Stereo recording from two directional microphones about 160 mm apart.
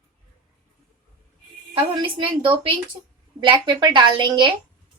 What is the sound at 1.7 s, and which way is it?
A woman's voice, 35° right (ahead or behind).